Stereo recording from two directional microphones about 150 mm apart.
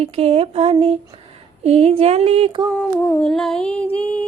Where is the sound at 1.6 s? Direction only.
45° right (ahead or behind).